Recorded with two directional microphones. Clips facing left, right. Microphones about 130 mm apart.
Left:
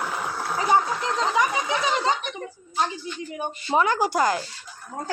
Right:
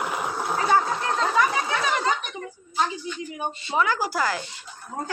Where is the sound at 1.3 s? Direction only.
20° left (ahead or behind).